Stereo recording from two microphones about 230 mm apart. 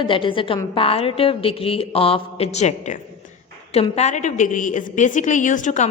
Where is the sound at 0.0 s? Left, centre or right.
Left.